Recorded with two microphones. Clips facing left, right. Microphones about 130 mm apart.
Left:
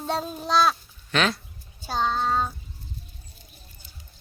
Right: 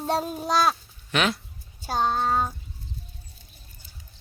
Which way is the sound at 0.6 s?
15° right (ahead or behind).